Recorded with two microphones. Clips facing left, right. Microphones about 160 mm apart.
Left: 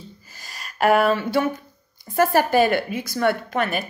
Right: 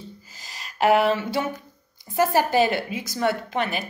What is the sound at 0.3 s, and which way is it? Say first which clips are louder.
Gasp: left 1 dB; 50° left (ahead or behind).